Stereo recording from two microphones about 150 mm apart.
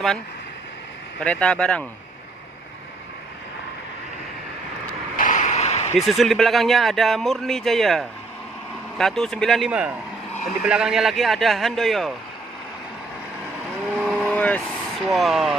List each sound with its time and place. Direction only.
1.2 s speech: 10° left (ahead or behind)
5.1 s a sound: 60° left (ahead or behind)
5.9 s speech: centre (ahead or behind)
9.7 s speech: 10° right (ahead or behind)
14.0 s vehicle: 10° left (ahead or behind)
15.0 s speech: centre (ahead or behind)